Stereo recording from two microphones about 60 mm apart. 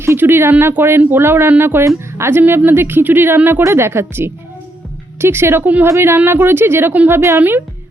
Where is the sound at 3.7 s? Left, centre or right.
Right.